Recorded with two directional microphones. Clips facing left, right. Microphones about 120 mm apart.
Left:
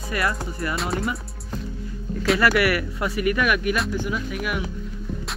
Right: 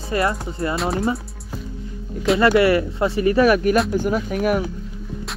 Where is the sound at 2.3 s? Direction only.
25° right (ahead or behind); by 4.6 s 40° right (ahead or behind).